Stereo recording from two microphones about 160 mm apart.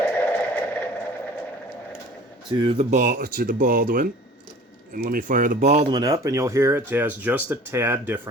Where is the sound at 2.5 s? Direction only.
35° right (ahead or behind).